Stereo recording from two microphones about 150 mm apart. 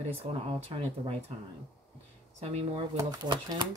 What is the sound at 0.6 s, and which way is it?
Speech, 40° right (ahead or behind).